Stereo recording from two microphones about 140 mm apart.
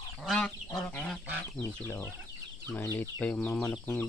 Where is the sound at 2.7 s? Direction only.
20° left (ahead or behind).